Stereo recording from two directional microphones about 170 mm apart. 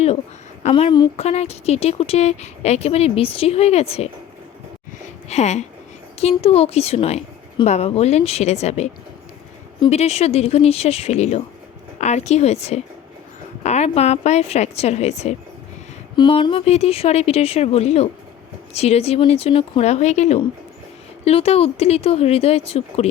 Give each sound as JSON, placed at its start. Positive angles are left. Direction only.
{"t": 0.7, "sound": "speech", "side_deg": 30}
{"t": 1.1, "sound": "speech", "side_deg": 40}
{"t": 5.3, "sound": "speech", "side_deg": 40}
{"t": 16.1, "sound": "speech", "side_deg": 30}